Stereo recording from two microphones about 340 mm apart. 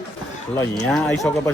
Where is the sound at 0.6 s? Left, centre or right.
Centre.